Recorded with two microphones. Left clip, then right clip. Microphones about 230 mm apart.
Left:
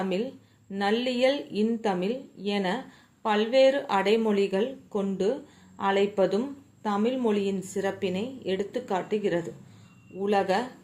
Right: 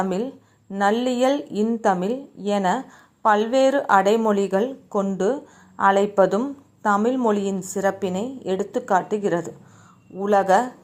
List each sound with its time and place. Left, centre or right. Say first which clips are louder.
0.1 s a woman's voice: right 4 dB; right